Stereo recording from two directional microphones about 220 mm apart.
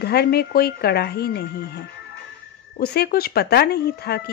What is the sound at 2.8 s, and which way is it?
Speech, 45° left (ahead or behind).